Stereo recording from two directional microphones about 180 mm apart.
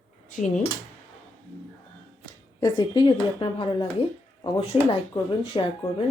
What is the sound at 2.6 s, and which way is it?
Speech, 25° left (ahead or behind).